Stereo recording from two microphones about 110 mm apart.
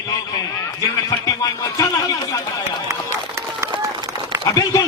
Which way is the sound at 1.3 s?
30° left (ahead or behind).